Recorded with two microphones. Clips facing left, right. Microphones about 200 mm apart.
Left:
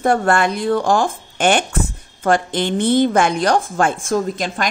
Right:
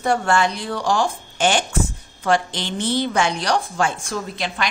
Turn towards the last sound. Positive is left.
turn(degrees=50)  # may be behind; listen again after turning